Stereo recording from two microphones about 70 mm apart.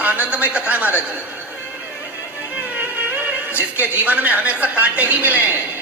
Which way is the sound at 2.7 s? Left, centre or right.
Right.